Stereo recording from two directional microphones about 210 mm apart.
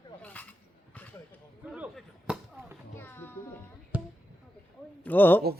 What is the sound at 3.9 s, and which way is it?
Basketball bounce, 10° right (ahead or behind).